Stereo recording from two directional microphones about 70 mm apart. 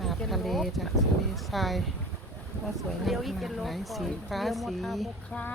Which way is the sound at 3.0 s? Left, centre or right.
Centre.